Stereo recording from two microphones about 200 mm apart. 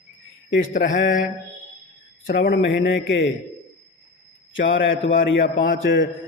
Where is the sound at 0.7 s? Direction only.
45° left (ahead or behind).